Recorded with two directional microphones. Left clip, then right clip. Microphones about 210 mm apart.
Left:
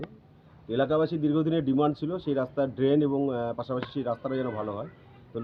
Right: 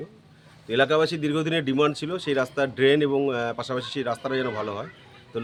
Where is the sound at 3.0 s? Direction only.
40° right (ahead or behind).